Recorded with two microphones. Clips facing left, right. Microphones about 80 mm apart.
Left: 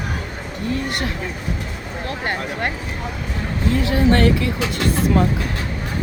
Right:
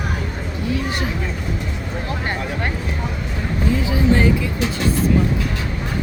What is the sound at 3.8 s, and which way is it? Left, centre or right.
Speech, left.